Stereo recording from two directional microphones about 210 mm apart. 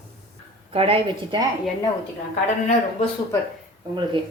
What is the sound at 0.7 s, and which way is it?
Speech, 25° right (ahead or behind).